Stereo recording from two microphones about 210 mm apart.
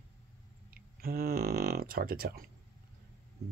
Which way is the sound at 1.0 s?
45° right (ahead or behind).